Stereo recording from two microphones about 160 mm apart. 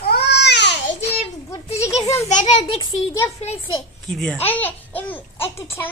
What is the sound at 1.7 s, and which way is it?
Speech, 20° left (ahead or behind).